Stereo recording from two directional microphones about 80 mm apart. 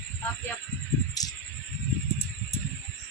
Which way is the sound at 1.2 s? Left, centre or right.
Left.